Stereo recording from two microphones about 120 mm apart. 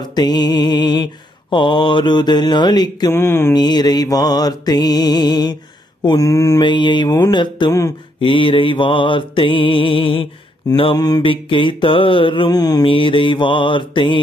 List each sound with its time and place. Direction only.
0.0 s music: 35° left (ahead or behind)
3.1 s mantra: 20° left (ahead or behind)
3.5 s music: 35° left (ahead or behind)
6.1 s mantra: 25° left (ahead or behind)
6.6 s music: 40° left (ahead or behind)
8.2 s mantra: 45° left (ahead or behind)
11.0 s music: 30° left (ahead or behind)
11.2 s mantra: 45° left (ahead or behind)
12.8 s mantra: 45° left (ahead or behind)